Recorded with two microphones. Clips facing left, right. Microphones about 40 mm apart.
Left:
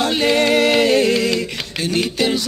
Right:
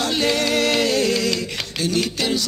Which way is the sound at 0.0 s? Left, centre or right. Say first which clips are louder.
Left 4 dB; centre.